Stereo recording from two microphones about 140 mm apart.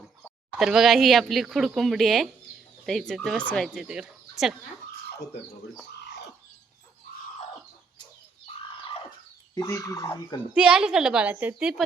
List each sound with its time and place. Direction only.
0.3 s speech: centre (ahead or behind)
3.8 s speech: 5° right (ahead or behind)
8.6 s a sound: 40° left (ahead or behind)
9.6 s speech: 25° left (ahead or behind)
10.5 s a woman's voice: 5° right (ahead or behind)